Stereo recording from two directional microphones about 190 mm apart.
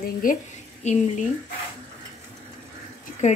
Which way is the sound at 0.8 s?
35° left (ahead or behind).